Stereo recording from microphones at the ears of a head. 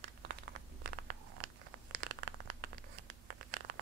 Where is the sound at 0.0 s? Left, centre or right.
Right.